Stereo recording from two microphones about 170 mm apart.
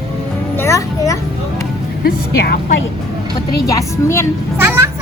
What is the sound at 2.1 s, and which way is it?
Speech, 60° left (ahead or behind).